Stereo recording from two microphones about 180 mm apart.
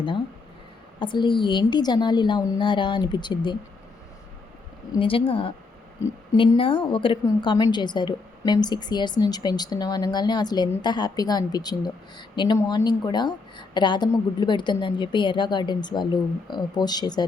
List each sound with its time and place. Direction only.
0.9 s a woman's voice: 25° left (ahead or behind)
4.9 s a woman's voice: 30° left (ahead or behind)